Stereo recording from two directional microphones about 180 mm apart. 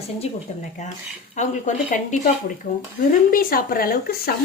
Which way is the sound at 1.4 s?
45° left (ahead or behind).